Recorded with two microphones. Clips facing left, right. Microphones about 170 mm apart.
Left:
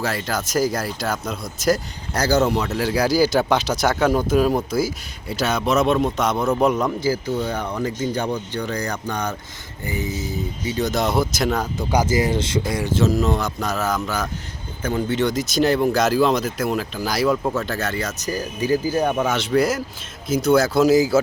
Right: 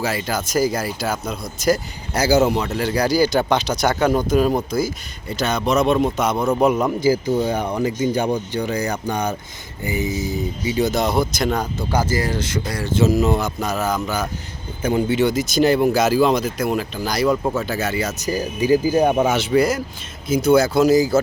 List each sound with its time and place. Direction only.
0.0 s speech: centre (ahead or behind)
10.9 s speech: centre (ahead or behind)
11.8 s speech: 15° left (ahead or behind)
12.9 s speech: 5° right (ahead or behind)
14.8 s speech: 10° right (ahead or behind); by 21.2 s 5° left (ahead or behind)